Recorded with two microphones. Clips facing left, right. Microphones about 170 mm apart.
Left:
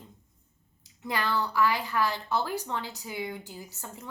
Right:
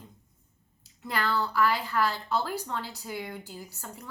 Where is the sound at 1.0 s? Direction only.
20° left (ahead or behind).